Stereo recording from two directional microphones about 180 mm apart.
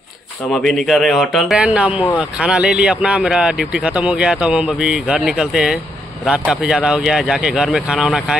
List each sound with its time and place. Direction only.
0.5 s speech: centre (ahead or behind)